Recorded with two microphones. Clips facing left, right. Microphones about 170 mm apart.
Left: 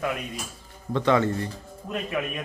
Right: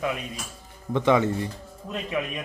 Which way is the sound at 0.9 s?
15° right (ahead or behind).